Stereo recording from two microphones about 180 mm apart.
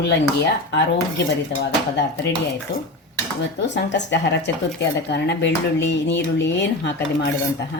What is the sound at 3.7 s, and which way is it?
Speech, 75° left (ahead or behind).